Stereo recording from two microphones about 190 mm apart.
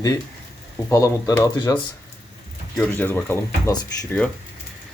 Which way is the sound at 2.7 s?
10° left (ahead or behind).